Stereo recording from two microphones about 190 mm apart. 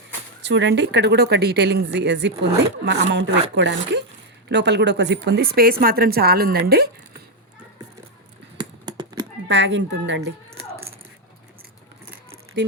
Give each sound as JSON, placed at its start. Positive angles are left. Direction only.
{"t": 0.4, "sound": "a woman's voice", "side_deg": -70}
{"t": 8.5, "sound": "a sound", "side_deg": -25}
{"t": 9.5, "sound": "speech", "side_deg": -70}